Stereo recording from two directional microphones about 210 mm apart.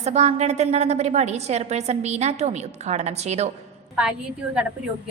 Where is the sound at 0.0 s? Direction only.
30° right (ahead or behind).